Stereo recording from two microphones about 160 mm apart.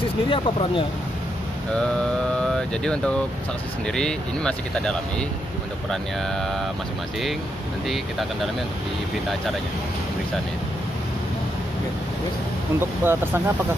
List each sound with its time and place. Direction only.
0.3 s speech: 35° left (ahead or behind)
2.3 s speech: 5° left (ahead or behind)
13.0 s speech: 15° right (ahead or behind)